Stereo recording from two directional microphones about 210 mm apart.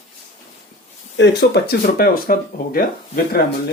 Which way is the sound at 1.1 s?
55° left (ahead or behind).